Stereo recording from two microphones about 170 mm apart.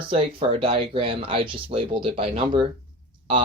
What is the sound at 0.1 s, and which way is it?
Speech, 35° right (ahead or behind).